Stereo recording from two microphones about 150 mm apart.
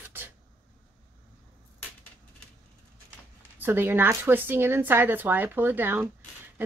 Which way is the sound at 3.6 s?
15° right (ahead or behind).